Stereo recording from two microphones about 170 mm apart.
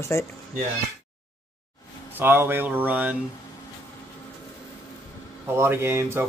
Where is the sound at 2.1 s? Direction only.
15° right (ahead or behind).